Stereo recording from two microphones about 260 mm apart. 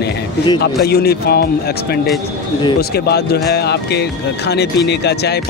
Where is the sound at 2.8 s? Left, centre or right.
Left.